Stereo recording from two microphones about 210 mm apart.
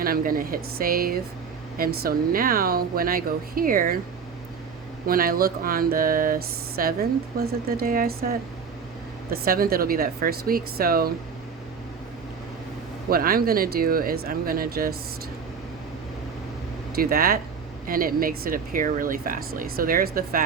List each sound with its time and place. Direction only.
0.0 s speech: 45° right (ahead or behind)
5.0 s speech: 45° right (ahead or behind)
13.1 s speech: 45° right (ahead or behind)
16.9 s speech: 45° right (ahead or behind)